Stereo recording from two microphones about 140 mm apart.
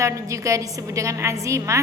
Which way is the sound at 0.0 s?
20° right (ahead or behind).